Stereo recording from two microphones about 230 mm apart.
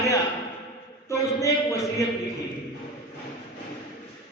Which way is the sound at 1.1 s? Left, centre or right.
Centre.